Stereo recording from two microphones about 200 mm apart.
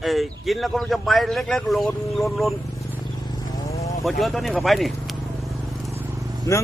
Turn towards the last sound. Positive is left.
turn(degrees=15)  # may be behind; listen again after turning